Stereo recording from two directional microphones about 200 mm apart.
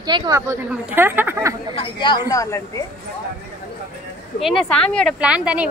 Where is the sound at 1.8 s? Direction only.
25° left (ahead or behind).